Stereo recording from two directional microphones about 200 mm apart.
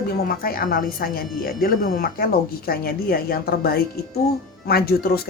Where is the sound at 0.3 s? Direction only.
50° left (ahead or behind).